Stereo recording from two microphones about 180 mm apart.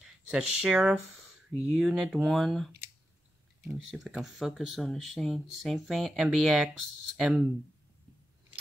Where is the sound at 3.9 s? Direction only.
Centre (ahead or behind).